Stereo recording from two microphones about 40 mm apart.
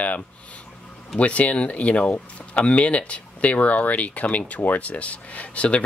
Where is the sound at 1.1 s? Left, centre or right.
Left.